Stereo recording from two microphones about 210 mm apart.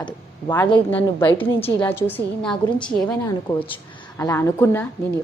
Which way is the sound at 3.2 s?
25° left (ahead or behind).